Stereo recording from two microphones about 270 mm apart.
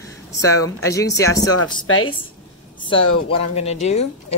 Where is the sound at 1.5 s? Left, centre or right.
Left.